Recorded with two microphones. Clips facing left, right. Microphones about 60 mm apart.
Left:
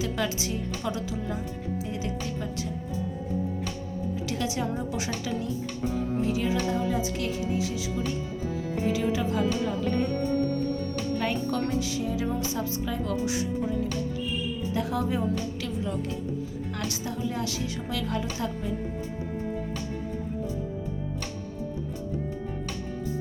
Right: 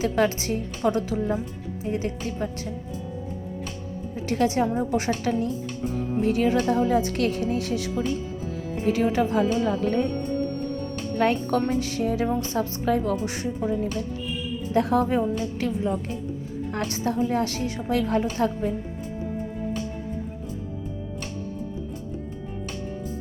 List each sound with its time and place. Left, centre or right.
0.0 s a woman's voice: right
4.3 s a woman's voice: right
8.9 s a woman's voice: right
11.1 s a woman's voice: right
15.2 s a woman's voice: right